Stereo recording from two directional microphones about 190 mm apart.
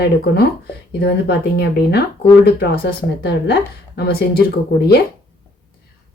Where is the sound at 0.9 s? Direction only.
60° left (ahead or behind).